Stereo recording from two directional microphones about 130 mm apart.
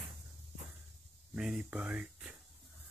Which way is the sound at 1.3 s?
5° right (ahead or behind).